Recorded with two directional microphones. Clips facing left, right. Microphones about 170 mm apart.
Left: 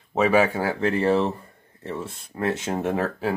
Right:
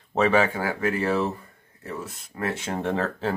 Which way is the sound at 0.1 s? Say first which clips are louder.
Left 2 dB; 5° left (ahead or behind).